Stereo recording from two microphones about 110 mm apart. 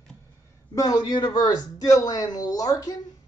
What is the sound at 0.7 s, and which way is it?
Speech, 35° left (ahead or behind).